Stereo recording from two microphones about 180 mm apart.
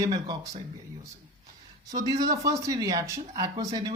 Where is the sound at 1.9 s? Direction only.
20° right (ahead or behind).